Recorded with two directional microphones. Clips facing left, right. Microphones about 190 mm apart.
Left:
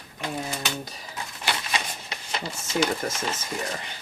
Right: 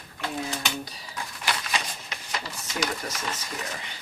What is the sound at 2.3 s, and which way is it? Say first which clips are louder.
Speech: left 4 dB; 30° left (ahead or behind).